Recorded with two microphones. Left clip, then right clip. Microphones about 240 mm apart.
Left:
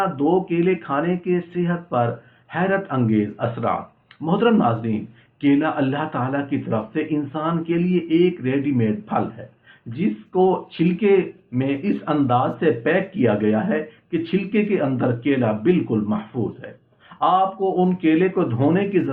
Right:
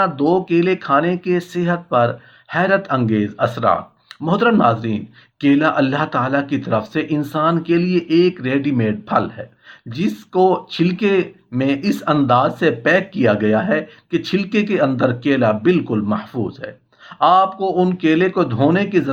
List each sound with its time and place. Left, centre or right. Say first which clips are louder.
0.0 s speech: right 4 dB; right